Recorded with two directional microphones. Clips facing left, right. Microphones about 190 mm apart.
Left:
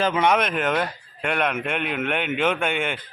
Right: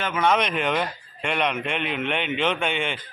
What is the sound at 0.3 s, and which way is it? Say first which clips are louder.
Speech: left 1 dB; 5° left (ahead or behind).